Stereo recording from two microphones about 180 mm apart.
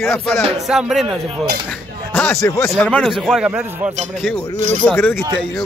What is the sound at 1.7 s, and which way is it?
Speech, 10° left (ahead or behind).